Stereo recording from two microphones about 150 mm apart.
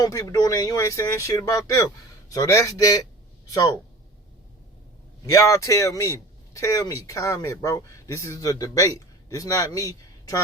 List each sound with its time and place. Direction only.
0.0 s speech: 25° left (ahead or behind)
5.2 s speech: 20° left (ahead or behind)